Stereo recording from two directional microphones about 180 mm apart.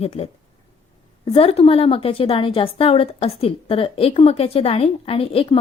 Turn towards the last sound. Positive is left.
turn(degrees=30)  # may be behind; listen again after turning